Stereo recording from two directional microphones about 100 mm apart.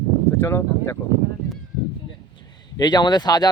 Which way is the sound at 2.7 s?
45° left (ahead or behind).